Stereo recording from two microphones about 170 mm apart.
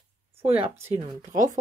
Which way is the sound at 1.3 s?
50° right (ahead or behind).